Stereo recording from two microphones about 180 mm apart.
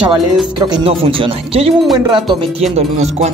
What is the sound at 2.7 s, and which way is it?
Speech, 35° right (ahead or behind).